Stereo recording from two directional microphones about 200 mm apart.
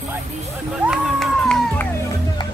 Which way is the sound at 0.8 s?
Centre (ahead or behind).